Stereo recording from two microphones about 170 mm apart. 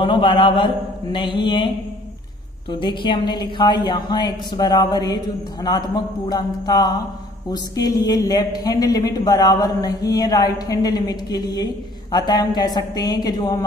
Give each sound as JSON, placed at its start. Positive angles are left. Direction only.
{"t": 0.0, "sound": "a woman's voice", "side_deg": 30}
{"t": 2.7, "sound": "a woman's voice", "side_deg": 30}